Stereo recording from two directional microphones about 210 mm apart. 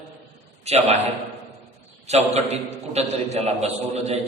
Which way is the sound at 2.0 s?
30° right (ahead or behind).